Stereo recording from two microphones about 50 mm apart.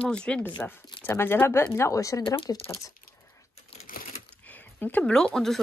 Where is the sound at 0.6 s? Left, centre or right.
Left.